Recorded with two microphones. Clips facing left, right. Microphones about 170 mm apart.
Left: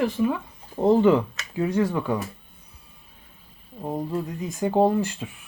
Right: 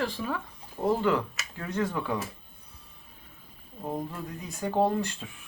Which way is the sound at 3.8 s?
15° left (ahead or behind).